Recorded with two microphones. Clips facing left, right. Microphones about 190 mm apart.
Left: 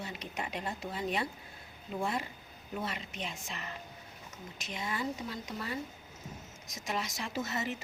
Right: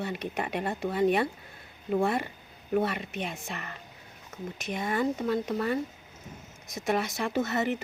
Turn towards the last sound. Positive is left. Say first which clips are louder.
# right 8 dB
turn(degrees=-60)  # may be behind; listen again after turning